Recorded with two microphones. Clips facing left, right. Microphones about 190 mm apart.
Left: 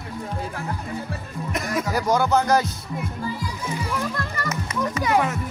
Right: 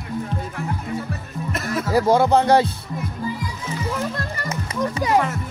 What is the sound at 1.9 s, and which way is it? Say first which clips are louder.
Speech: right 5 dB; 30° right (ahead or behind).